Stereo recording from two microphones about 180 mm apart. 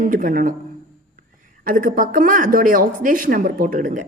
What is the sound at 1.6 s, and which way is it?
A woman's voice, 50° right (ahead or behind).